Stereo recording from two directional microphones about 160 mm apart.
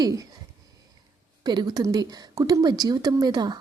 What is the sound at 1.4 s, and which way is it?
Speech, 25° right (ahead or behind).